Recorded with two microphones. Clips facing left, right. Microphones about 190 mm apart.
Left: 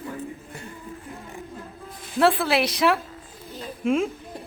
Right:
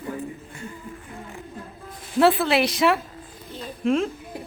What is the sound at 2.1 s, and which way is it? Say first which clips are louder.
A woman's voice: right 2 dB; centre (ahead or behind).